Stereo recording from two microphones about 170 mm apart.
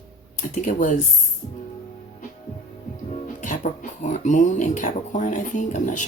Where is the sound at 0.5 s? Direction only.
50° left (ahead or behind).